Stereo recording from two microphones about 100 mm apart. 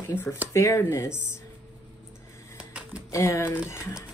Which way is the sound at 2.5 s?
10° right (ahead or behind).